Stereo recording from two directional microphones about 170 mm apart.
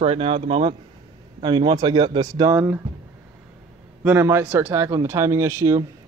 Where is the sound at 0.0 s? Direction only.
35° right (ahead or behind); by 2.8 s 15° right (ahead or behind).